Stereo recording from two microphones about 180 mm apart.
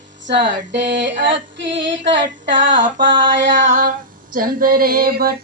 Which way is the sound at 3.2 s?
90° right.